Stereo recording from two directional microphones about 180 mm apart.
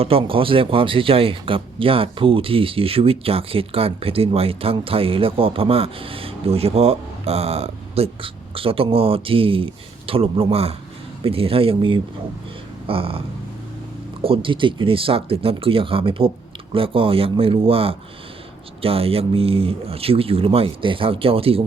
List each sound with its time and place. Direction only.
0.0 s speech: 30° right (ahead or behind)